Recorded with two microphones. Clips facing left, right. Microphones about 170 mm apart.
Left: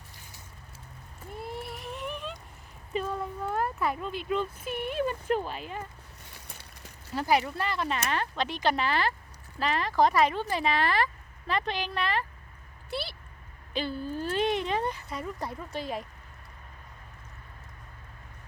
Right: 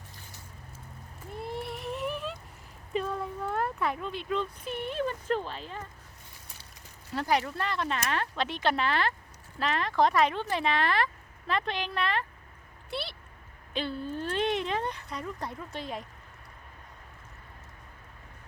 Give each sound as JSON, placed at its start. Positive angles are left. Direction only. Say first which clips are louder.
{"t": 1.3, "sound": "a sound", "louder": "right 2 dB", "side_deg": 0}
{"t": 2.9, "sound": "speech", "louder": "even", "side_deg": 0}
{"t": 7.1, "sound": "a woman's voice", "louder": "left 2 dB", "side_deg": 5}